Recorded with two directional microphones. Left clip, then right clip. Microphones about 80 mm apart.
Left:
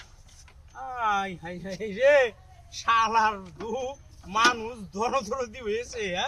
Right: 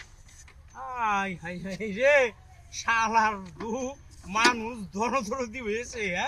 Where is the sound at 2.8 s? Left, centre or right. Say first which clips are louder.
Left 2 dB; centre.